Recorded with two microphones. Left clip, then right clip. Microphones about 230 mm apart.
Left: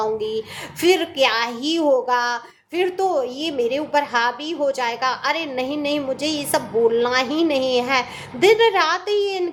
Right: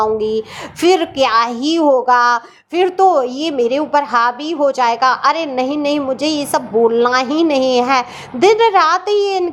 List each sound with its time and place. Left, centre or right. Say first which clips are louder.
0.0 s a child's voice: right 7 dB; centre